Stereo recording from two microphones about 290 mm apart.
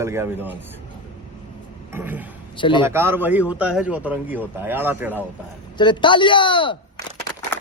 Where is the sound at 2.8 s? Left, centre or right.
Centre.